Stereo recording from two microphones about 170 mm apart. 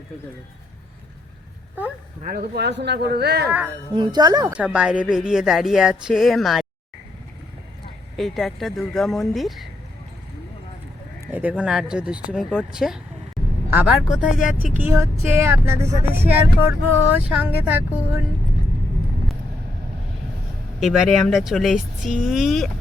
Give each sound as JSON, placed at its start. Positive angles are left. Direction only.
{"t": 2.2, "sound": "speech", "side_deg": -65}
{"t": 3.9, "sound": "a woman's voice", "side_deg": -25}
{"t": 4.5, "sound": "speech", "side_deg": -5}
{"t": 8.1, "sound": "speech", "side_deg": 0}
{"t": 11.3, "sound": "speech", "side_deg": -10}
{"t": 14.8, "sound": "speech", "side_deg": -15}
{"t": 20.7, "sound": "speech", "side_deg": 0}